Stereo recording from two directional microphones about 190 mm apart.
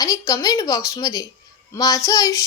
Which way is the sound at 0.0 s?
20° left (ahead or behind).